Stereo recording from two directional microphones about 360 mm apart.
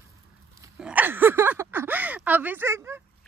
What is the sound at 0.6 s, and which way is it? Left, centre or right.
Speech, centre.